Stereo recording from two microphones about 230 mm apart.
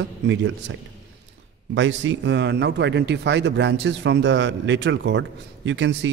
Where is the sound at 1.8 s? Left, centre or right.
Right.